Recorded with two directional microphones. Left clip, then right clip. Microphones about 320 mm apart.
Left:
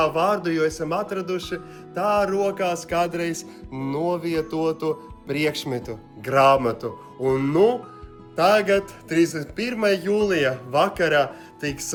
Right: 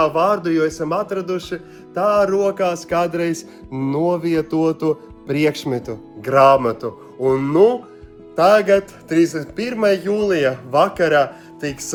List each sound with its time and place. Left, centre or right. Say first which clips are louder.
0.0 s a man's voice: right 4 dB; centre